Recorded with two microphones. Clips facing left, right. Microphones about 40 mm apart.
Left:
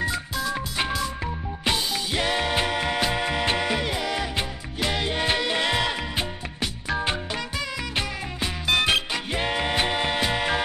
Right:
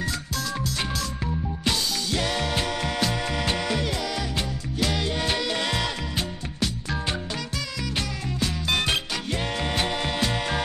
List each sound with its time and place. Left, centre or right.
0.0 s music: centre